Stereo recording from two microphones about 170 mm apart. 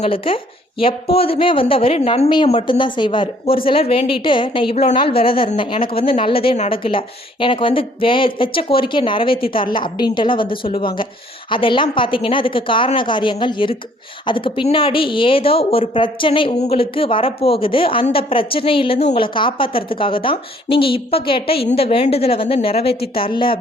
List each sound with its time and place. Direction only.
0.0 s a woman's voice: 35° left (ahead or behind)